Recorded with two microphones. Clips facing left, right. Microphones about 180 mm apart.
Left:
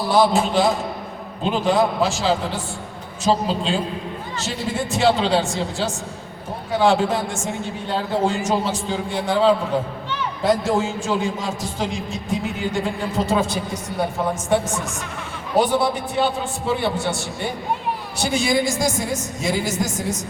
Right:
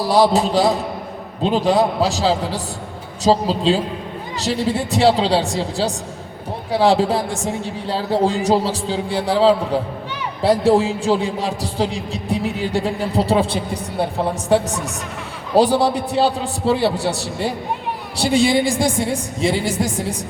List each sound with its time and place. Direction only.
0.1 s a man's voice: 35° right (ahead or behind)